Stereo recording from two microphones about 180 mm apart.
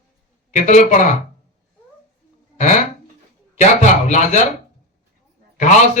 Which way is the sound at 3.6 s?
40° left (ahead or behind).